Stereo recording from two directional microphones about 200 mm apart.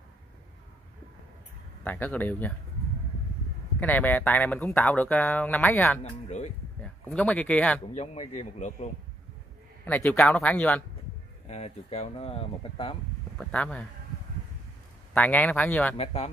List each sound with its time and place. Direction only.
1.9 s speech: 10° left (ahead or behind)
3.8 s speech: 10° left (ahead or behind)
6.2 s a sound: 35° left (ahead or behind)
6.8 s speech: 5° left (ahead or behind)
7.9 s speech: 30° left (ahead or behind)
9.8 s speech: 5° left (ahead or behind)
11.4 s speech: 30° left (ahead or behind)
13.4 s speech: 5° left (ahead or behind)
15.1 s speech: 10° left (ahead or behind)
16.0 s speech: 30° left (ahead or behind)